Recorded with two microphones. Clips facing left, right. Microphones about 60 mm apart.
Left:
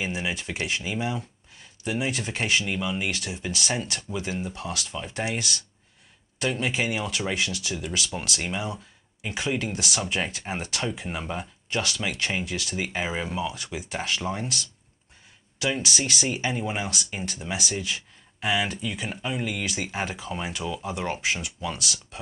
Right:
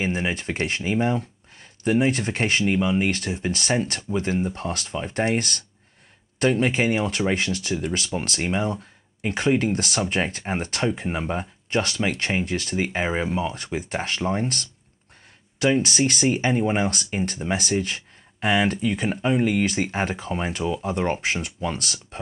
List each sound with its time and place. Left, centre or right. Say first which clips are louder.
0.0 s speech: right 5 dB; right
8.6 s speech: right 6 dB; right
16.1 s speech: right 6 dB; right